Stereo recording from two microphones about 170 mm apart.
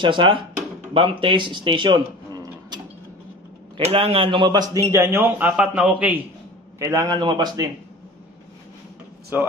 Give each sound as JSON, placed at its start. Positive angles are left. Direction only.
{"t": 0.0, "sound": "a man's voice", "side_deg": -30}
{"t": 9.3, "sound": "a man's voice", "side_deg": -10}